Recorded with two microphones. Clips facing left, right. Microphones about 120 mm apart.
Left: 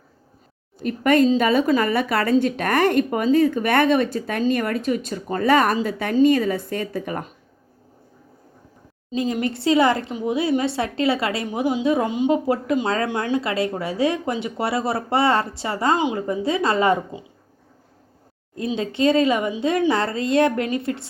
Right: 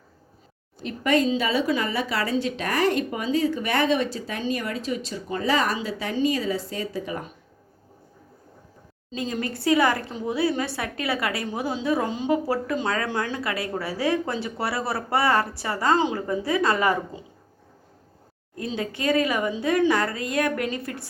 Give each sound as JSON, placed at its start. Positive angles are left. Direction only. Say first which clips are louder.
{"t": 0.8, "sound": "speech", "louder": "left 5 dB", "side_deg": 50}
{"t": 9.1, "sound": "a woman's voice", "louder": "left 6 dB", "side_deg": 20}
{"t": 18.5, "sound": "a woman's voice", "louder": "left 5 dB", "side_deg": 20}